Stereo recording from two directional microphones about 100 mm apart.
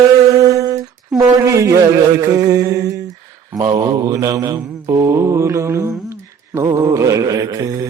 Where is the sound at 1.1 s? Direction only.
35° right (ahead or behind).